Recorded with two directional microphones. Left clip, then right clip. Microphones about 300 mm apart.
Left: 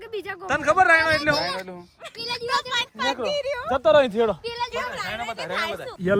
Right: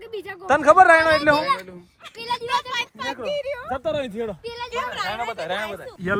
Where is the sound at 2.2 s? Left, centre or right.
Centre.